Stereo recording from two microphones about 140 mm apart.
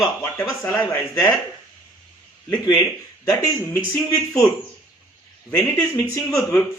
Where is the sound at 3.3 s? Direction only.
25° left (ahead or behind).